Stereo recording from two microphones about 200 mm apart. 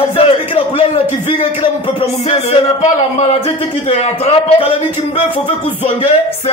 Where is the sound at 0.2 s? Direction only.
30° left (ahead or behind).